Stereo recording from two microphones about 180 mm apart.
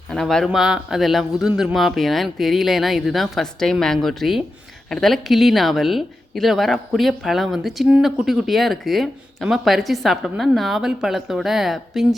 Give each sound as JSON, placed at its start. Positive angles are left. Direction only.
{"t": 0.1, "sound": "speech", "side_deg": 5}